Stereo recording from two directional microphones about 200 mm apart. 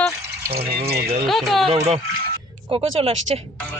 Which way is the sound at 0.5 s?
50° right (ahead or behind).